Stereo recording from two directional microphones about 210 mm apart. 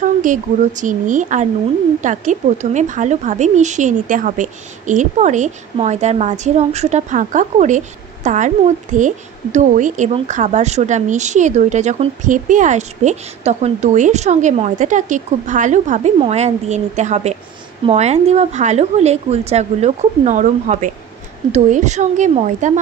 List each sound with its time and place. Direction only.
0.0 s a woman's voice: 35° right (ahead or behind)